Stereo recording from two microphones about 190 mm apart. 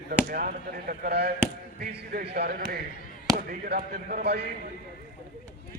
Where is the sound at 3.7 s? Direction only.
55° right (ahead or behind).